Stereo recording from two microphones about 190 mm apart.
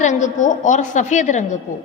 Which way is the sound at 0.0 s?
40° left (ahead or behind).